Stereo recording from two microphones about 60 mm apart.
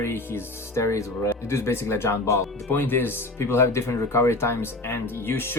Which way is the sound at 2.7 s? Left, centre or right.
Left.